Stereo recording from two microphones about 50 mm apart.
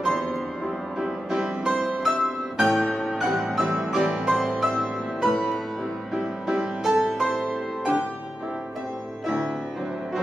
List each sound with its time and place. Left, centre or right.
1.0 s music: centre
6.1 s music: centre